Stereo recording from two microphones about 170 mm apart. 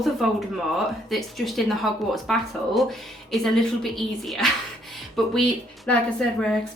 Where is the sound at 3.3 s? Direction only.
Centre (ahead or behind).